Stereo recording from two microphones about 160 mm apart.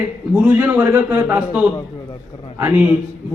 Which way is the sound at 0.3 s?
10° right (ahead or behind).